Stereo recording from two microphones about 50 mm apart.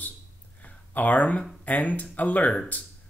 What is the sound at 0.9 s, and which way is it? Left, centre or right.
Speech, left.